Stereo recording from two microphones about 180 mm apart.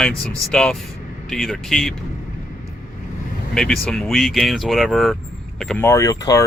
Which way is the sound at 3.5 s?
5° left (ahead or behind).